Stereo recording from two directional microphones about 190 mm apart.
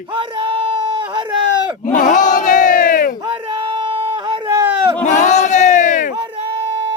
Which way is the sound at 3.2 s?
25° right (ahead or behind).